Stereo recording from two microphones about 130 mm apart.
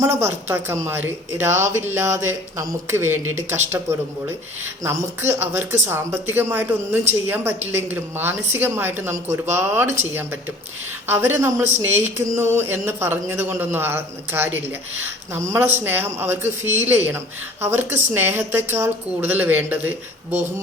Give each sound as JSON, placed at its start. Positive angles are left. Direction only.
{"t": 0.0, "sound": "speech", "side_deg": -20}